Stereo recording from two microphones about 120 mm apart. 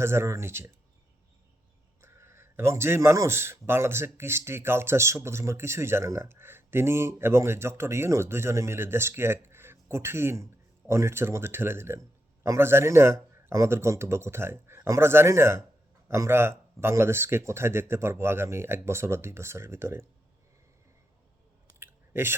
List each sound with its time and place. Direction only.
0.0 s speech: 20° right (ahead or behind)
2.0 s speech: 20° right (ahead or behind)
21.8 s chewing: 20° right (ahead or behind)